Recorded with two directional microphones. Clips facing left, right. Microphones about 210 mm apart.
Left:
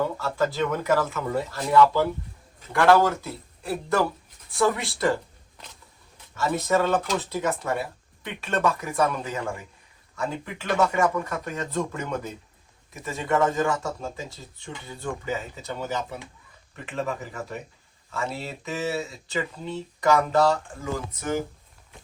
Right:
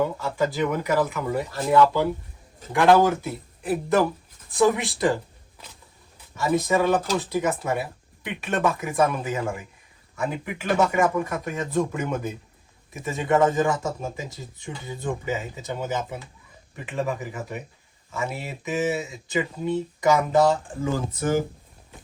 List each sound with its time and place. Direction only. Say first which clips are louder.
0.0 s speech: right 1 dB; 15° right (ahead or behind)
6.3 s speech: right 2 dB; 15° right (ahead or behind)